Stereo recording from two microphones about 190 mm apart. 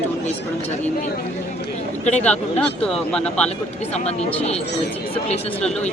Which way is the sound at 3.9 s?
35° left (ahead or behind).